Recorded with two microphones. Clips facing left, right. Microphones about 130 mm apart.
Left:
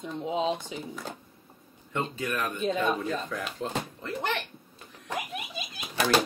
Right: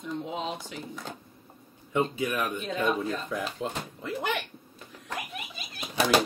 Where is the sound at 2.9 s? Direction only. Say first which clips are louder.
Right 1 dB; centre (ahead or behind).